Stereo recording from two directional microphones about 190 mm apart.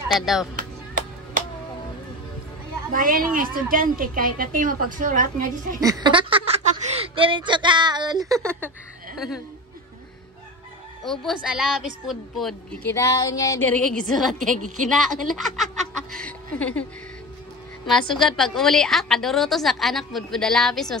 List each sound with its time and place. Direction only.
0.2 s a woman's voice: centre (ahead or behind)
0.6 s music: 45° right (ahead or behind)
2.9 s a woman's voice: 50° right (ahead or behind)
5.8 s speech: 20° right (ahead or behind); by 9.4 s 5° right (ahead or behind)
11.1 s a woman's voice: centre (ahead or behind)
12.9 s speech: 20° left (ahead or behind); by 14.2 s 5° left (ahead or behind)
14.9 s a sound: centre (ahead or behind)
18.3 s a woman's voice: centre (ahead or behind)